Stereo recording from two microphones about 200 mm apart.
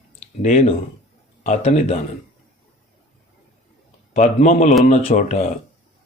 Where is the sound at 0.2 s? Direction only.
35° left (ahead or behind).